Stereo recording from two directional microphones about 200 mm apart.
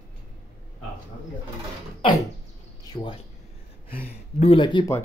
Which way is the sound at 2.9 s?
25° left (ahead or behind).